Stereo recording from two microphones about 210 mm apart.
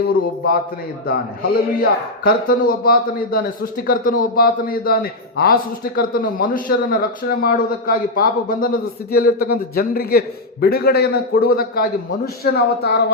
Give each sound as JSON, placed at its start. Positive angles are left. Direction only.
{"t": 0.1, "sound": "a man's voice", "side_deg": 45}